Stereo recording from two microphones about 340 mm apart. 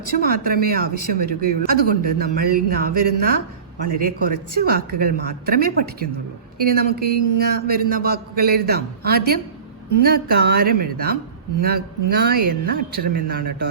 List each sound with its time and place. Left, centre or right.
0.2 s speech: right
12.1 s speech: right